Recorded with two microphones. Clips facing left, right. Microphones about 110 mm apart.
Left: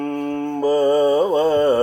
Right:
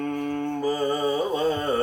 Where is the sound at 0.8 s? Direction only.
65° left (ahead or behind).